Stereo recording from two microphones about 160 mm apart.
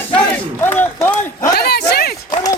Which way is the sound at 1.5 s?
85° left.